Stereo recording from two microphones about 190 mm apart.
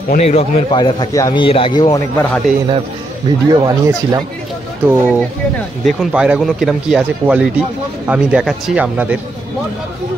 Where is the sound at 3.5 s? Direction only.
20° right (ahead or behind).